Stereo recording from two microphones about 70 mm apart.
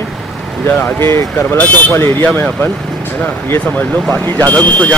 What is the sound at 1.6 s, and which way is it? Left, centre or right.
Speech, left.